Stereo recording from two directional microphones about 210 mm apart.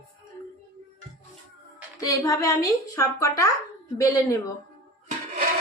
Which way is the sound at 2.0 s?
15° left (ahead or behind).